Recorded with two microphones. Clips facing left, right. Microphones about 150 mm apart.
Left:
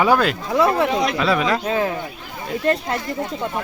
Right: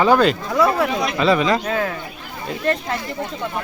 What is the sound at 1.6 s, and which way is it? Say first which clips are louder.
Speech: left 1 dB; 20° left (ahead or behind).